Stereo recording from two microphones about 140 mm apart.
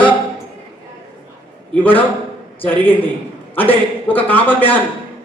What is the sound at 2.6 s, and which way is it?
Speech, 15° left (ahead or behind).